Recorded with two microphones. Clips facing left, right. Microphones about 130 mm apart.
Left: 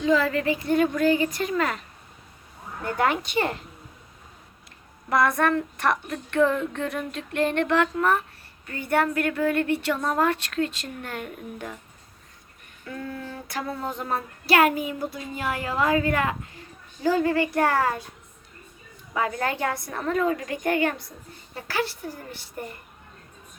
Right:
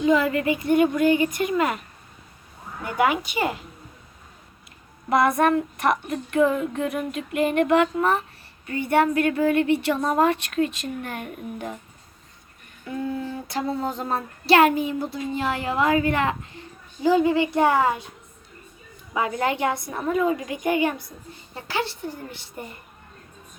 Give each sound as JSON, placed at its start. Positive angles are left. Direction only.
{"t": 0.0, "sound": "a woman's voice", "side_deg": -25}
{"t": 0.8, "sound": "a child's voice", "side_deg": 0}
{"t": 5.0, "sound": "a woman's voice", "side_deg": -20}
{"t": 6.3, "sound": "a sound", "side_deg": -5}
{"t": 8.6, "sound": "a woman's voice", "side_deg": -25}
{"t": 12.8, "sound": "a sound", "side_deg": -20}
{"t": 14.0, "sound": "a woman's voice", "side_deg": -25}
{"t": 19.1, "sound": "a woman's voice", "side_deg": -25}
{"t": 20.0, "sound": "a child's voice", "side_deg": -5}
{"t": 21.5, "sound": "a woman's voice", "side_deg": -25}